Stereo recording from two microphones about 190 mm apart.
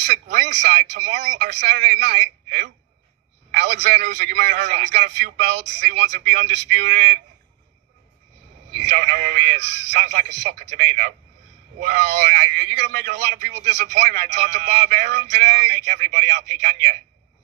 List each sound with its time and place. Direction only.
0.0 s a man's voice: 45° right (ahead or behind)
8.8 s a man's voice: 50° right (ahead or behind)
14.1 s speech: 55° right (ahead or behind)
15.8 s a man's voice: 45° right (ahead or behind)